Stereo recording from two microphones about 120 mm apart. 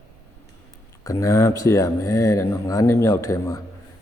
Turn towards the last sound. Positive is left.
turn(degrees=25)  # may be behind; listen again after turning